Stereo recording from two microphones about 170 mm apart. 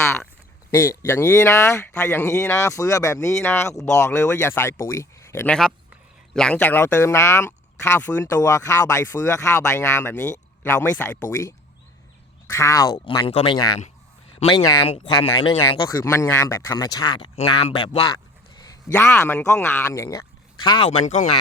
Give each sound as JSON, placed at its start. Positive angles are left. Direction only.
{"t": 0.7, "sound": "speech", "side_deg": 15}
{"t": 18.6, "sound": "speech", "side_deg": 20}
{"t": 20.8, "sound": "speech", "side_deg": 40}